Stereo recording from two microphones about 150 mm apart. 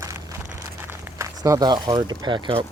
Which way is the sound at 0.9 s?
20° right (ahead or behind).